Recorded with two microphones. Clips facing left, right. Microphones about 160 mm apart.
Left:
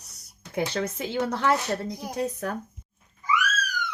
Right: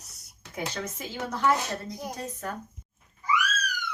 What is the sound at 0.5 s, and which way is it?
Speech, 65° left (ahead or behind).